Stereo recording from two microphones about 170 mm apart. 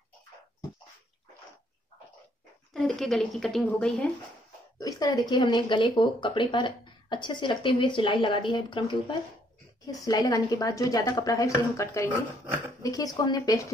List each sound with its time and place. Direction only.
2.7 s a woman's voice: centre (ahead or behind)
4.7 s speech: 20° left (ahead or behind)